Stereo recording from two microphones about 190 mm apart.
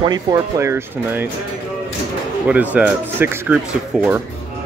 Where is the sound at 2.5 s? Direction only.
10° right (ahead or behind).